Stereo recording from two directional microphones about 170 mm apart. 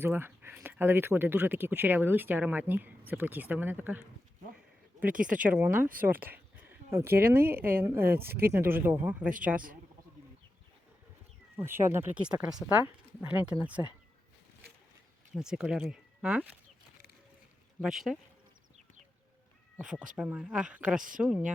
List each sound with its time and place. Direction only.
0.0 s speech: 10° right (ahead or behind)
5.0 s speech: 50° right (ahead or behind)
5.5 s speech: 10° right (ahead or behind)
6.1 s speech: 60° right (ahead or behind)
6.6 s a sound: 15° right (ahead or behind)
7.5 s speech: 15° right (ahead or behind)
8.2 s speech: 65° right (ahead or behind)
8.5 s speech: 15° right (ahead or behind)
11.5 s speech: 15° right (ahead or behind)
15.4 s speech: 5° right (ahead or behind)
17.7 s speech: centre (ahead or behind)
19.8 s speech: 5° right (ahead or behind)